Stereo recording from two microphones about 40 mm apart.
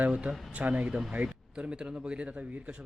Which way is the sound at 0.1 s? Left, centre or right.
Right.